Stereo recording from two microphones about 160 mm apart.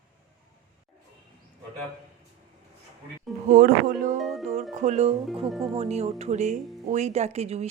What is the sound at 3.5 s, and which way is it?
Speech, 60° right (ahead or behind).